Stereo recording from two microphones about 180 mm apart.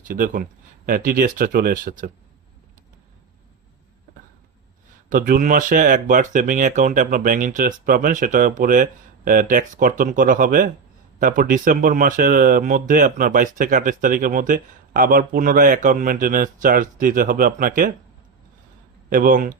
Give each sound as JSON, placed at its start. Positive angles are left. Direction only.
{"t": 0.0, "sound": "speech", "side_deg": -50}
{"t": 5.0, "sound": "speech", "side_deg": -50}
{"t": 19.1, "sound": "speech", "side_deg": -50}